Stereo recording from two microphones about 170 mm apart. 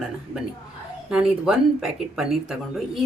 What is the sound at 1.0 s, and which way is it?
A woman's voice, 5° right (ahead or behind).